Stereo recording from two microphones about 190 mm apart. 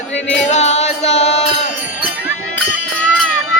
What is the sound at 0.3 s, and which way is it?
Music, 35° left (ahead or behind).